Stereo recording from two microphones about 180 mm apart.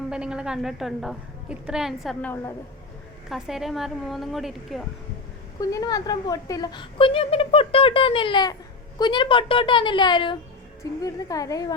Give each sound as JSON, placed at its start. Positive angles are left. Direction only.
{"t": 0.1, "sound": "a woman's voice", "side_deg": -5}
{"t": 2.2, "sound": "a woman's voice", "side_deg": 15}
{"t": 3.2, "sound": "a woman's voice", "side_deg": 0}
{"t": 5.5, "sound": "a woman's voice", "side_deg": 20}